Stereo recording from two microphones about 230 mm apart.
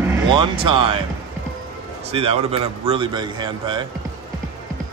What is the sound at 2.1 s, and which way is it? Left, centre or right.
A man's voice, right.